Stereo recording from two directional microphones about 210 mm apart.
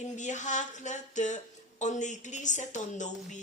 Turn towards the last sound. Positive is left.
turn(degrees=35)  # may be behind; listen again after turning